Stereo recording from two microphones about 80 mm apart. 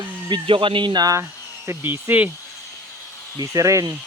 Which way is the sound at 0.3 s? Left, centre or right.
Right.